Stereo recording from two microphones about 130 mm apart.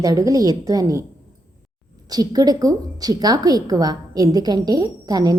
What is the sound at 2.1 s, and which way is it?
A woman's voice, 30° right (ahead or behind).